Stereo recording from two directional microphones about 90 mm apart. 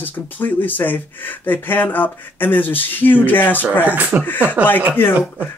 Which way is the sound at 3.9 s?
20° right (ahead or behind).